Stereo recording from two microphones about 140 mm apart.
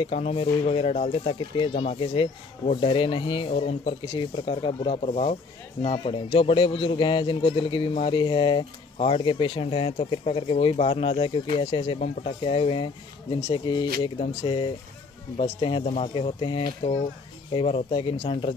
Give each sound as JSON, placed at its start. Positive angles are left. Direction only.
{"t": 0.0, "sound": "speech", "side_deg": 45}
{"t": 1.6, "sound": "a man's voice", "side_deg": 35}